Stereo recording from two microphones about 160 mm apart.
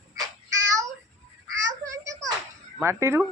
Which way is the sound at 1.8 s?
20° right (ahead or behind).